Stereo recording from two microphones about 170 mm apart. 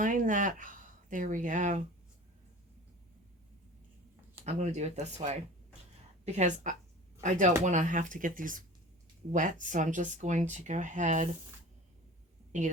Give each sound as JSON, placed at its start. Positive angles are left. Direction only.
{"t": 0.0, "sound": "speech", "side_deg": -50}
{"t": 4.4, "sound": "speech", "side_deg": -40}
{"t": 12.5, "sound": "a woman's voice", "side_deg": -45}